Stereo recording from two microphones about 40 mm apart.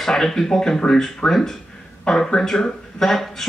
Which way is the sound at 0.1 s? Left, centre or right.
Centre.